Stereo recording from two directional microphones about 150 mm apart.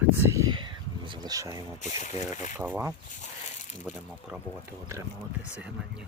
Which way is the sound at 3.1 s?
55° left (ahead or behind).